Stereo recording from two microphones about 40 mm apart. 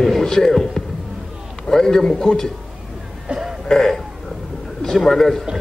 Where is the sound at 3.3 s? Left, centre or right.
Centre.